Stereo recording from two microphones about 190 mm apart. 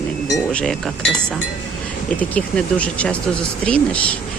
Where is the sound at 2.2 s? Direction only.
5° left (ahead or behind).